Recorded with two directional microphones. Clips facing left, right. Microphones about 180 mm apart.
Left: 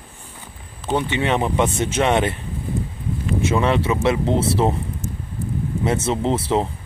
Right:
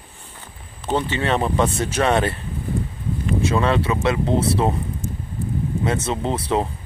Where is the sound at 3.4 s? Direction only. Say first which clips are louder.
Left 1 dB; 20° left (ahead or behind).